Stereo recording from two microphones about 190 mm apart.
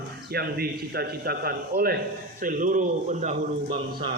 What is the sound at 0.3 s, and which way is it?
A man's voice, 55° right (ahead or behind).